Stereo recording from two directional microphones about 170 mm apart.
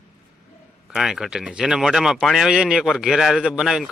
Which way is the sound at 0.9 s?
5° right (ahead or behind).